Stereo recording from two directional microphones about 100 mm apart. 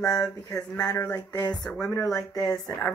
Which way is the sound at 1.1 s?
40° left (ahead or behind).